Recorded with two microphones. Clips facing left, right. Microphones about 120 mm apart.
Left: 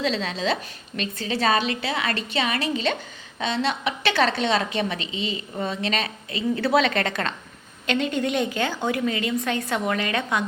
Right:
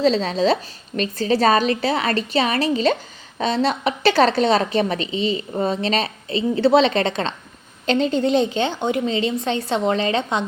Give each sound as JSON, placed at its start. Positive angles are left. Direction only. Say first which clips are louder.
{"t": 0.0, "sound": "a woman's voice", "louder": "right 7 dB", "side_deg": -35}